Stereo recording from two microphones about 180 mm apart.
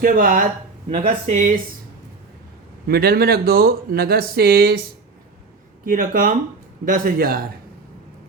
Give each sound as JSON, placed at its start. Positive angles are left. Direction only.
{"t": 0.0, "sound": "a man's voice", "side_deg": -50}
{"t": 0.9, "sound": "speech", "side_deg": -35}
{"t": 2.8, "sound": "a man's voice", "side_deg": -60}